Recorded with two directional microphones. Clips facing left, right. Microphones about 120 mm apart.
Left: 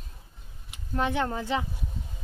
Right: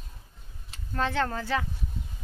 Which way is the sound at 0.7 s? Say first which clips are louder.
Left 2 dB; 15° left (ahead or behind).